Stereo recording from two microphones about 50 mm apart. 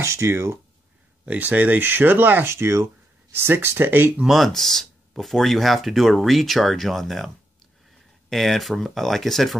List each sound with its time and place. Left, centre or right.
0.0 s speech: right
1.2 s speech: right
2.4 s speech: right
4.3 s speech: centre
8.3 s speech: centre